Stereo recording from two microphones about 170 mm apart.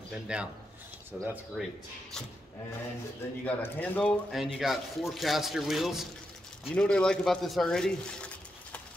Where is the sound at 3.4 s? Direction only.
10° left (ahead or behind).